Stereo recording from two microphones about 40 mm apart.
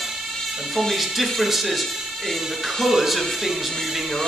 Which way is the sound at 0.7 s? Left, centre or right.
Centre.